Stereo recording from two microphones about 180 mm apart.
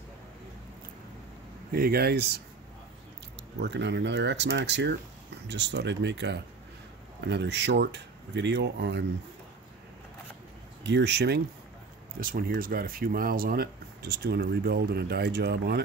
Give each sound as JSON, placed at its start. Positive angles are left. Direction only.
{"t": 1.7, "sound": "speech", "side_deg": -60}
{"t": 3.5, "sound": "speech", "side_deg": -70}
{"t": 10.8, "sound": "speech", "side_deg": -75}
{"t": 12.2, "sound": "speech", "side_deg": -50}